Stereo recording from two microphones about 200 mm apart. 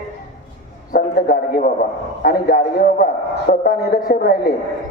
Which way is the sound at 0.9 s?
50° left (ahead or behind).